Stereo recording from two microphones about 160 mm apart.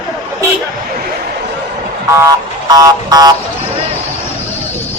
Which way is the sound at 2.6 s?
25° right (ahead or behind).